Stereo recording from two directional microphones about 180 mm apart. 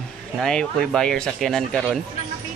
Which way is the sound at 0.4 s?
5° left (ahead or behind).